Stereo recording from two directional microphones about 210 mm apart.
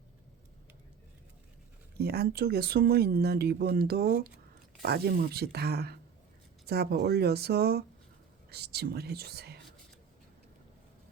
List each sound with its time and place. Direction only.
2.0 s speech: 50° right (ahead or behind)